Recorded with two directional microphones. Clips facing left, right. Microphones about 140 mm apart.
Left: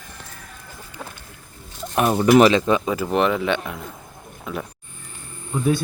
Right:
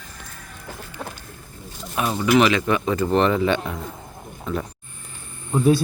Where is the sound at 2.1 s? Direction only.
35° left (ahead or behind).